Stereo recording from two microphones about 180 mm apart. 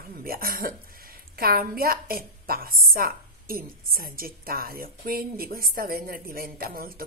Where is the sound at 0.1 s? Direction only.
55° right (ahead or behind).